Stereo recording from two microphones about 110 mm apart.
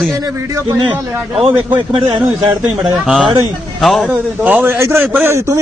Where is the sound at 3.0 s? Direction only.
10° right (ahead or behind).